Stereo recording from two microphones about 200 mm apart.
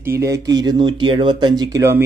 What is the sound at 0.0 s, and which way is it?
Speech, 15° right (ahead or behind).